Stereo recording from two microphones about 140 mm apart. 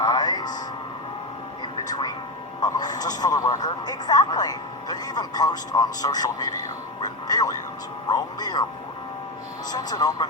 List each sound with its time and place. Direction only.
0.0 s speech: 25° left (ahead or behind)
1.8 s music: 30° left (ahead or behind)
2.6 s speech: 25° left (ahead or behind)
9.7 s speech: 25° left (ahead or behind)